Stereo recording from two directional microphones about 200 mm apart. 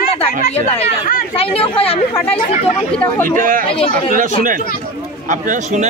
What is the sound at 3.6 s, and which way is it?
Speech, 25° left (ahead or behind).